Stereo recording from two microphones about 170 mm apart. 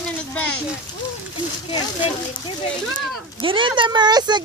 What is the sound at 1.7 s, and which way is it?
Speech, 25° left (ahead or behind).